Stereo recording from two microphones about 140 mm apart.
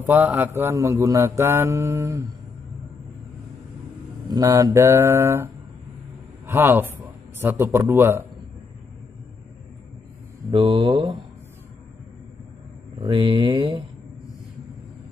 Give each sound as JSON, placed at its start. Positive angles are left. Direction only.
{"t": 0.0, "sound": "speech", "side_deg": -10}
{"t": 4.3, "sound": "speech", "side_deg": -25}
{"t": 10.5, "sound": "speech", "side_deg": -35}
{"t": 13.0, "sound": "speech", "side_deg": -30}